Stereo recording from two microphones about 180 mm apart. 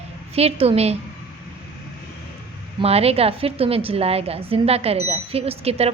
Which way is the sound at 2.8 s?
35° right (ahead or behind).